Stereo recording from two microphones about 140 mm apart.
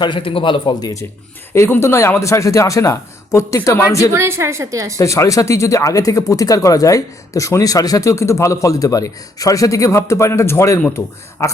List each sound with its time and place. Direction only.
0.0 s a man's voice: 35° left (ahead or behind)
4.1 s a woman's voice: 20° right (ahead or behind)
4.9 s speech: 20° left (ahead or behind)